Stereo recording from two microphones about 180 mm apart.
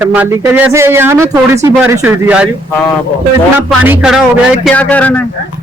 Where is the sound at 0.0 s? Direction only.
10° right (ahead or behind).